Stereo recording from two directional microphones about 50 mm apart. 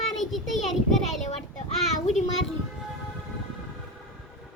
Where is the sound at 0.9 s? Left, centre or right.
Centre.